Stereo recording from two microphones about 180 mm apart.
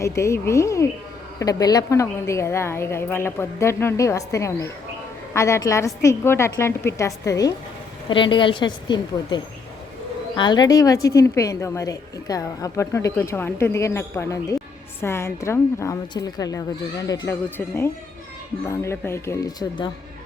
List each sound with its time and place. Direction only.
0.0 s a woman's voice: 15° left (ahead or behind)
18.6 s a woman's voice: 15° left (ahead or behind)